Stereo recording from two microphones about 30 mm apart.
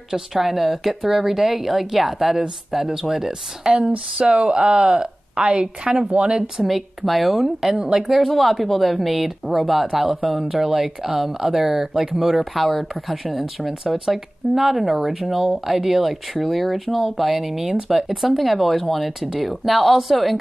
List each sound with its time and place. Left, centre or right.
0.1 s speech: centre
4.2 s a woman's voice: right
6.5 s speech: centre
7.4 s speech: centre
8.3 s speech: centre
12.5 s speech: centre